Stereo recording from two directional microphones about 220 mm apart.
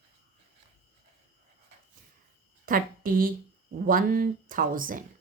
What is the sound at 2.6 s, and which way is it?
Speech, 40° right (ahead or behind).